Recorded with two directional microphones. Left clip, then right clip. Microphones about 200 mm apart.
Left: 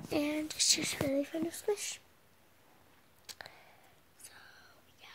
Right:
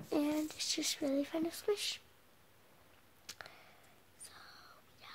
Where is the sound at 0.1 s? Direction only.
10° right (ahead or behind).